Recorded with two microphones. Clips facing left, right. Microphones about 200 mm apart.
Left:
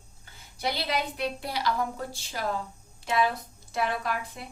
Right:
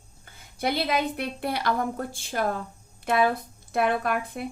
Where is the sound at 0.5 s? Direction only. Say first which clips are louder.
Right 4 dB; 55° right (ahead or behind).